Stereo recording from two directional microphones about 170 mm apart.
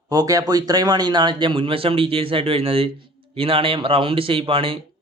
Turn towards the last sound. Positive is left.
turn(degrees=-30)  # may be behind; listen again after turning